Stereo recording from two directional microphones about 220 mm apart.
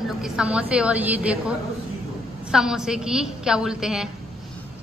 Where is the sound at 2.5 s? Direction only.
Centre (ahead or behind).